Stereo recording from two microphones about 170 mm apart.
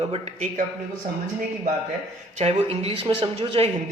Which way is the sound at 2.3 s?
35° right (ahead or behind).